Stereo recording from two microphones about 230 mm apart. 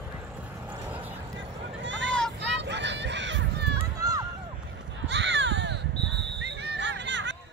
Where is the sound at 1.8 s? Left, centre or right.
Right.